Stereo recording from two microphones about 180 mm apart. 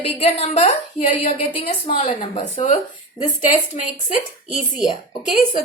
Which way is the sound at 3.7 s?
40° left (ahead or behind).